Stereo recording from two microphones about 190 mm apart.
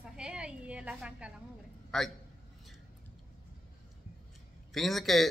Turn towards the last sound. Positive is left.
turn(degrees=0)  # may be behind; listen again after turning